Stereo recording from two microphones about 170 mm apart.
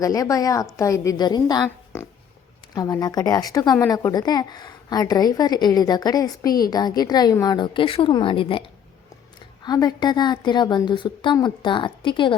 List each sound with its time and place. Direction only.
0.0 s a woman's voice: 20° left (ahead or behind)
1.6 s oink: 15° left (ahead or behind)
2.7 s a woman's voice: 20° left (ahead or behind)